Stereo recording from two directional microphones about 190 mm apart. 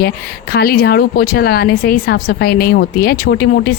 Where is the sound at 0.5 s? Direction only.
55° left (ahead or behind).